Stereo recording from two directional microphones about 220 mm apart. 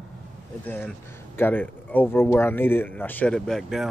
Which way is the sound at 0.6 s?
10° left (ahead or behind).